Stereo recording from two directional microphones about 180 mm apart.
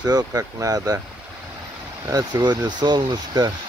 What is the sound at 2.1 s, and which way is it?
Speech, 20° right (ahead or behind).